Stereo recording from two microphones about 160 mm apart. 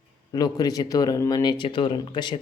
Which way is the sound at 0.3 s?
25° left (ahead or behind).